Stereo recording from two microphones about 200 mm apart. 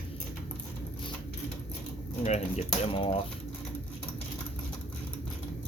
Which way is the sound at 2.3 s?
35° left (ahead or behind).